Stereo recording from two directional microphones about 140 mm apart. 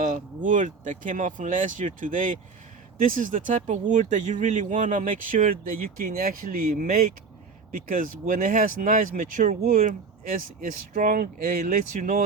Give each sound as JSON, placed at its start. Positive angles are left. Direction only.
{"t": 0.0, "sound": "speech", "side_deg": -65}
{"t": 7.9, "sound": "speech", "side_deg": -75}